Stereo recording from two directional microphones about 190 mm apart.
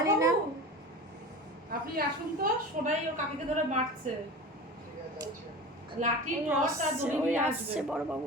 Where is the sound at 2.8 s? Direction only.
40° right (ahead or behind).